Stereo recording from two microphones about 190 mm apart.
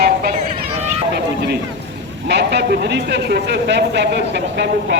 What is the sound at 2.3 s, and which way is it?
A man's voice, 60° right (ahead or behind).